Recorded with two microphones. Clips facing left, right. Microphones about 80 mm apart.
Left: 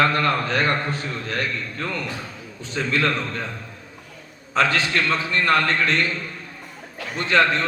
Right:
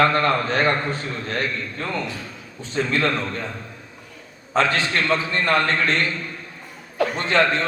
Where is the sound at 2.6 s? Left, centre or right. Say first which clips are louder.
Right 1 dB; right.